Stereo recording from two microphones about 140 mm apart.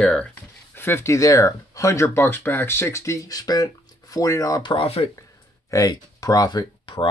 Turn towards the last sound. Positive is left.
turn(degrees=35)  # may be behind; listen again after turning